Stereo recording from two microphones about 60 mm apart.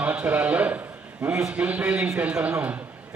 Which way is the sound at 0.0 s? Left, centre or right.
Right.